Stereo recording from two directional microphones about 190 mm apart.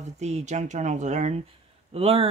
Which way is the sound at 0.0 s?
35° right (ahead or behind).